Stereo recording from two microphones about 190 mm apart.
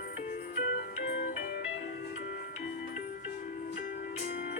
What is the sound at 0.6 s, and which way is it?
Music, 40° left (ahead or behind).